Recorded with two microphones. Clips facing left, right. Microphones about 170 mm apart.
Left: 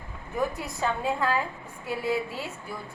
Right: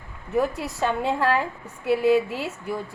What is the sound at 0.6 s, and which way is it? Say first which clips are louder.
A woman's voice: right 4 dB; 80° right.